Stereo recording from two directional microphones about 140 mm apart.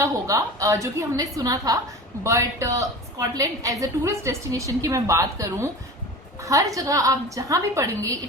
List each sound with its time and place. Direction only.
0.0 s a woman's voice: 25° right (ahead or behind)